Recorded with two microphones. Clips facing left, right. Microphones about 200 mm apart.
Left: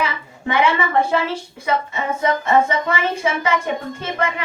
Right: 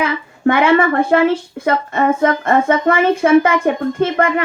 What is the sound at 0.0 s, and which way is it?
A woman's voice, 55° right (ahead or behind).